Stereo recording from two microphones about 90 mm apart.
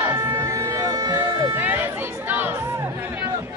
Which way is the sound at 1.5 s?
20° right (ahead or behind).